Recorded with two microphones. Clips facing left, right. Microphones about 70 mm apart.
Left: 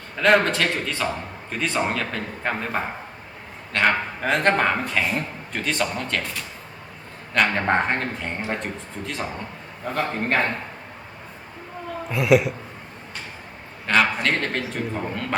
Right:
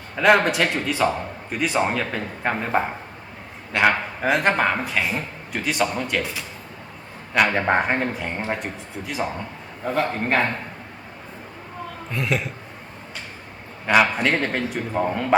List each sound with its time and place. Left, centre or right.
0.2 s a man's voice: centre
12.1 s a man's voice: centre
13.8 s speech: centre